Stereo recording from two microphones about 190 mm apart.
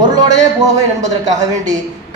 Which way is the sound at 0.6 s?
40° right (ahead or behind).